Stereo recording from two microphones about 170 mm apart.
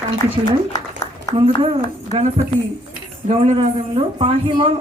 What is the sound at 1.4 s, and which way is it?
Speech, 35° right (ahead or behind).